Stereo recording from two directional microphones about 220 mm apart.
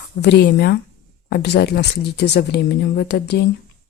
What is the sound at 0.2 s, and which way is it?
Speech, 50° left (ahead or behind).